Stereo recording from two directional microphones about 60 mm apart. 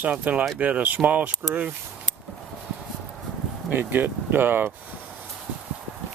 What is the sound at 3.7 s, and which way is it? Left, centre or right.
Speech, right.